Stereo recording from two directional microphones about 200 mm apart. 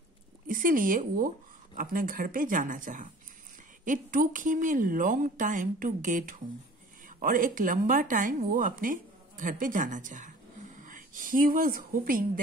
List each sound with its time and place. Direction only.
0.5 s a woman's voice: 40° right (ahead or behind)